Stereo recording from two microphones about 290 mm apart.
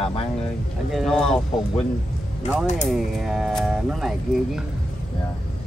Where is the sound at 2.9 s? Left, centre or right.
Centre.